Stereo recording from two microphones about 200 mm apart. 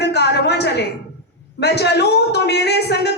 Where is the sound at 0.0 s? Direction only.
55° left (ahead or behind).